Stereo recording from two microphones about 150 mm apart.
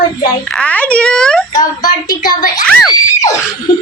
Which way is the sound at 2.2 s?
70° left (ahead or behind).